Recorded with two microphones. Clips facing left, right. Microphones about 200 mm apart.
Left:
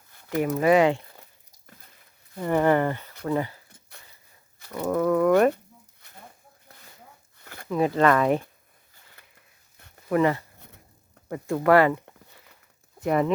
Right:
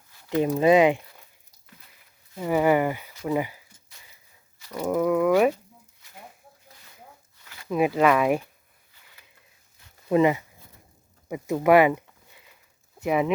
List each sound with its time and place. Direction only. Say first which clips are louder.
0.3 s speech: right 2 dB; 20° right (ahead or behind)
2.3 s speech: even; 5° right (ahead or behind)
3.7 s a sound: left 4 dB; 60° left (ahead or behind)
4.8 s speech: even; 10° right (ahead or behind)
7.4 s a sound: left 5 dB; 55° left (ahead or behind)
7.7 s speech: even; 10° right (ahead or behind)
10.1 s speech: right 2 dB; 15° right (ahead or behind)